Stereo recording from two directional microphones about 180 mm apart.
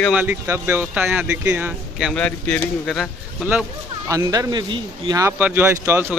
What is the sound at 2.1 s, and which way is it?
Speech, 5° left (ahead or behind).